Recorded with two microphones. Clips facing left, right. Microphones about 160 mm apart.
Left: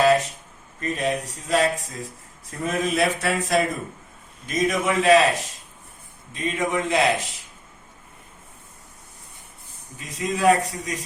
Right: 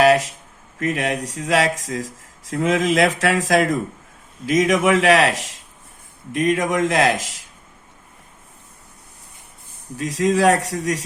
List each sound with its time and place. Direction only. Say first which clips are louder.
0.0 s a sound: right 3 dB; 90° right
0.8 s speech: right 3 dB; 90° right
10.0 s a man's voice: right 6 dB; 90° right